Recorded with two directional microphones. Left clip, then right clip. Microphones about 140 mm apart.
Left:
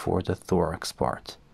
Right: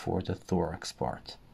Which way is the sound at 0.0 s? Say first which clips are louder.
Left 6 dB; 30° left (ahead or behind).